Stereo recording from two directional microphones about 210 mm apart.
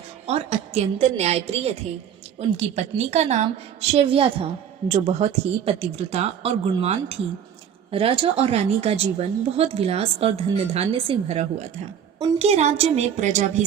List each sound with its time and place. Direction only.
0.3 s a woman's voice: 30° right (ahead or behind)